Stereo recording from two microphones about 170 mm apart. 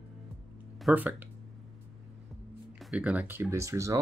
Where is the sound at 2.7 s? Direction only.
5° right (ahead or behind).